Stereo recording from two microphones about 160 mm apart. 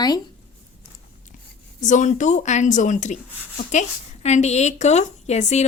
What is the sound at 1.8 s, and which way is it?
A woman's voice, 50° left (ahead or behind).